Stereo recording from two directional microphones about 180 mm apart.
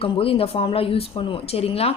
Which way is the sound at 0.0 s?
30° left (ahead or behind).